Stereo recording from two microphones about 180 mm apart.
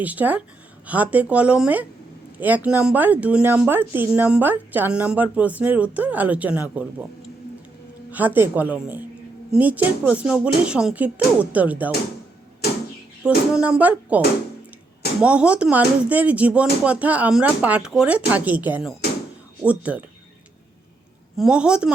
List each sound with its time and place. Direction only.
0.0 s speech: 10° right (ahead or behind)
8.1 s speech: 10° right (ahead or behind)
13.2 s speech: 5° right (ahead or behind)
15.2 s speech: 5° right (ahead or behind)
21.3 s a woman's voice: 5° right (ahead or behind)